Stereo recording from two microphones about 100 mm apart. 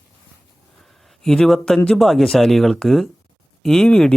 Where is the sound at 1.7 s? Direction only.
5° left (ahead or behind).